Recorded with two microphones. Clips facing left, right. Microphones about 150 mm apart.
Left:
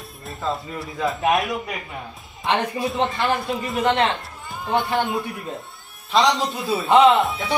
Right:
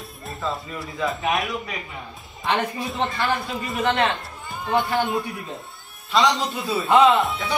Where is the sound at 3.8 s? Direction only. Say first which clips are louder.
Left 1 dB; 20° left (ahead or behind).